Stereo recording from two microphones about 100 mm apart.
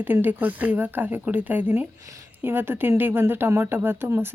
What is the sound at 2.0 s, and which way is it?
Speech, 35° right (ahead or behind).